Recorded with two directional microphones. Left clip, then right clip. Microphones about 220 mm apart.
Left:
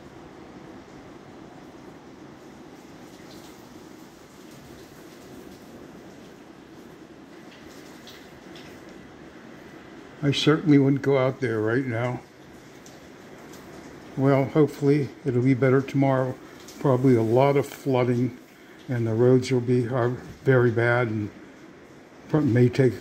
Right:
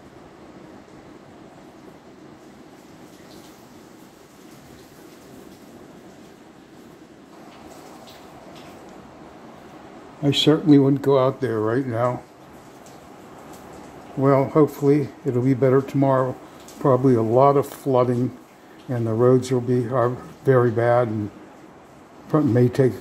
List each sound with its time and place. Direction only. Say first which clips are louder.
10.2 s speech: right 4 dB; 10° right (ahead or behind)
14.2 s speech: right 4 dB; centre (ahead or behind)
22.3 s speech: right 3 dB; 5° right (ahead or behind)